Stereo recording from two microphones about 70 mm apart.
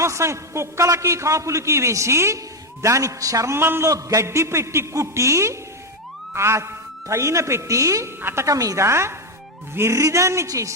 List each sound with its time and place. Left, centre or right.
0.0 s a man's voice: right
3.5 s a man's voice: right
3.8 s a man's voice: right
8.2 s a man's voice: right
8.4 s a man's voice: right